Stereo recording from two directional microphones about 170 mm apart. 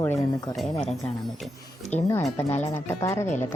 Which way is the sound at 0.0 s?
15° left (ahead or behind).